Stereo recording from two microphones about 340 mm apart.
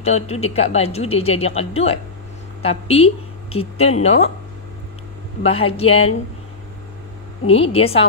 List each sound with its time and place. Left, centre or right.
0.0 s speech: centre
5.4 s speech: centre
7.4 s speech: centre